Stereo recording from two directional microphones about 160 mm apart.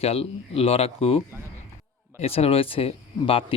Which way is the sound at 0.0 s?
40° left (ahead or behind).